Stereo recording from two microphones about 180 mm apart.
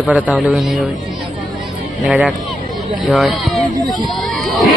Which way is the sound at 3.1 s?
Centre (ahead or behind).